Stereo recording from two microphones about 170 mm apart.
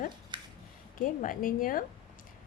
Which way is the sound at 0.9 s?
50° left (ahead or behind).